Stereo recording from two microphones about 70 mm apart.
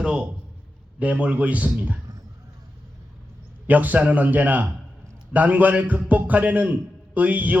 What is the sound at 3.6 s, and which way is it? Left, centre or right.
A man's voice, right.